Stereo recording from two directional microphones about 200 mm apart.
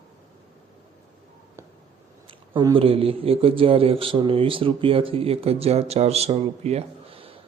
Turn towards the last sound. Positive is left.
turn(degrees=-30)  # may be behind; listen again after turning